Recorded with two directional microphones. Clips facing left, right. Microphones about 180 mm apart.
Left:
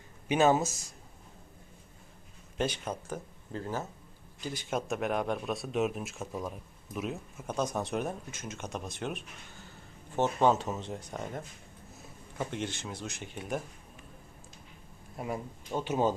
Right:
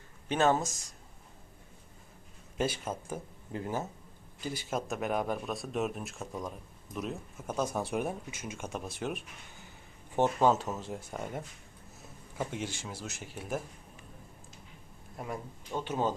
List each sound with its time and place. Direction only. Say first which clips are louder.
0.3 s speech: left 2 dB; 10° left (ahead or behind)
2.6 s speech: even; 5° right (ahead or behind)
4.7 s speech: left 2 dB; centre (ahead or behind)
10.5 s speech: left 1 dB; centre (ahead or behind)
15.1 s speech: left 3 dB; 5° left (ahead or behind)